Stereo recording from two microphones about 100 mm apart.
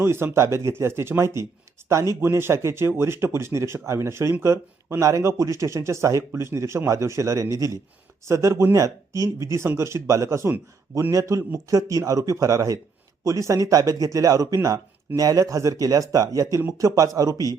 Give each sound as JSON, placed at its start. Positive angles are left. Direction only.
{"t": 0.0, "sound": "speech", "side_deg": -25}